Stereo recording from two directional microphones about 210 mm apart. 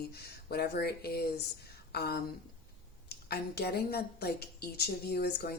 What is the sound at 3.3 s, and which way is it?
A woman's voice, 50° left (ahead or behind).